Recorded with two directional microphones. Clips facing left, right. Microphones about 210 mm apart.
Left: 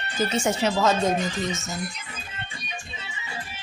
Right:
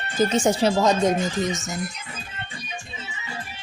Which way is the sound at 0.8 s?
15° right (ahead or behind).